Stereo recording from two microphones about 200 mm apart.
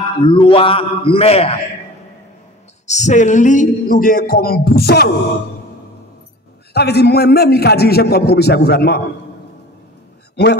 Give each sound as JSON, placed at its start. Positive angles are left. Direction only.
{"t": 0.2, "sound": "a man's voice", "side_deg": 25}
{"t": 2.9, "sound": "a man's voice", "side_deg": 35}
{"t": 6.7, "sound": "a man's voice", "side_deg": 55}
{"t": 10.3, "sound": "a man's voice", "side_deg": 55}